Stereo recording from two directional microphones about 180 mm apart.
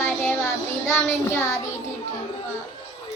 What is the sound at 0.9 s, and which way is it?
Speech, 15° left (ahead or behind).